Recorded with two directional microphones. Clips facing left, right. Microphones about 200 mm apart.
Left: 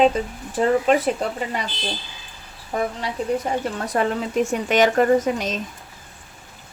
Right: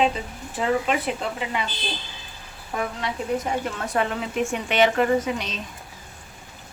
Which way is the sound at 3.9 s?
35° left (ahead or behind).